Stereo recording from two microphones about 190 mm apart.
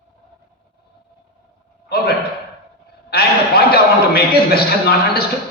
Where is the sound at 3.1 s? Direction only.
55° left (ahead or behind).